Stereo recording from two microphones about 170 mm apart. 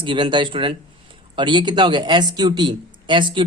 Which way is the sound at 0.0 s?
30° right (ahead or behind).